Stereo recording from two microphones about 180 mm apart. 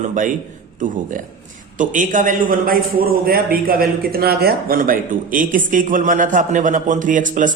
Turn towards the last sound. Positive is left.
turn(degrees=-45)  # may be behind; listen again after turning